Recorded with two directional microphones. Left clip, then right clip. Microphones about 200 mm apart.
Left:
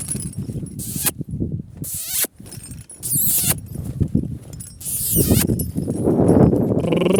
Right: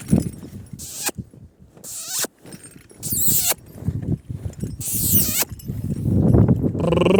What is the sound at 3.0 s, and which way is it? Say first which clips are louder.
Rodents: right 1 dB; 20° left (ahead or behind).